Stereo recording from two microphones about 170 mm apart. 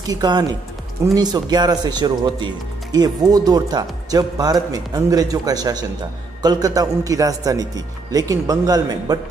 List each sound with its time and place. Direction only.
0.1 s speech: 25° right (ahead or behind)